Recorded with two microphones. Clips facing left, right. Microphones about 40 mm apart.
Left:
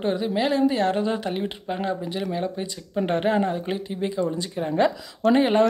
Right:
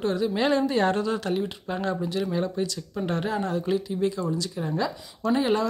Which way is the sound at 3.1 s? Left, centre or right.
Left.